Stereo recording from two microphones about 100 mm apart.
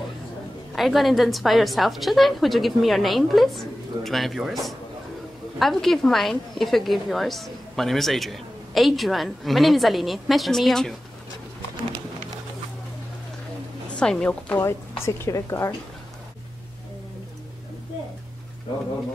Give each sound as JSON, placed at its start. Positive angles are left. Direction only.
{"t": 0.7, "sound": "a woman's voice", "side_deg": 0}
{"t": 13.9, "sound": "a woman's voice", "side_deg": 10}
{"t": 14.6, "sound": "speech", "side_deg": 25}